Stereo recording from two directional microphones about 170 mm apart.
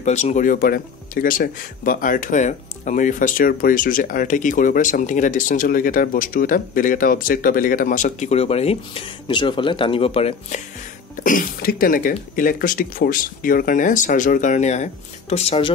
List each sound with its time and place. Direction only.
0.0 s speech: 40° left (ahead or behind)
11.2 s speech: 55° left (ahead or behind); by 15.7 s 35° left (ahead or behind)